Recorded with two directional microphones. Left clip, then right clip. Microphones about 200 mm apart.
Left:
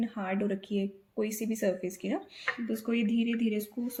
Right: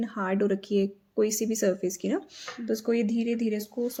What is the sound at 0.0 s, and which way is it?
Speech, 25° right (ahead or behind).